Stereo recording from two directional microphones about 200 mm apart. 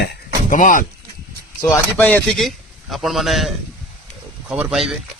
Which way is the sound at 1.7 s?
5° left (ahead or behind).